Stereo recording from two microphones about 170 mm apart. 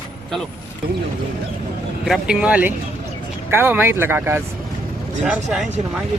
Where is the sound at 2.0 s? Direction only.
Centre (ahead or behind).